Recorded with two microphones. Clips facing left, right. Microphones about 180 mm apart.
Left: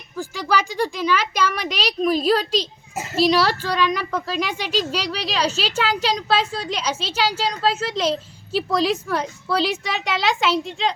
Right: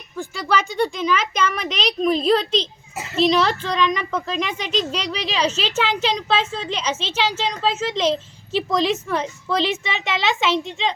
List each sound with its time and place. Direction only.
0.3 s a woman's voice: 10° left (ahead or behind)
2.9 s a sound: 45° left (ahead or behind)
3.2 s a woman's voice: 5° left (ahead or behind)